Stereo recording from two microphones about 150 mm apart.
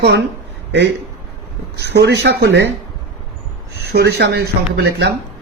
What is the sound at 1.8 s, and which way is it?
Speech, 90° right.